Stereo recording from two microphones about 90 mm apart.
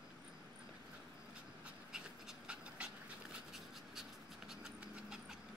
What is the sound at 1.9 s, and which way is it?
Dog, 10° right (ahead or behind).